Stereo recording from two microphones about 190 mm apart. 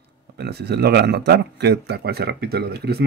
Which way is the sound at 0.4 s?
60° right (ahead or behind).